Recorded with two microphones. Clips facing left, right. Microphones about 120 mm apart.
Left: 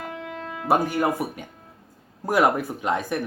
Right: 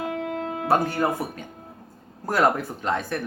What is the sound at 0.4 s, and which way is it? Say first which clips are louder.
Music: right 5 dB; 55° right (ahead or behind).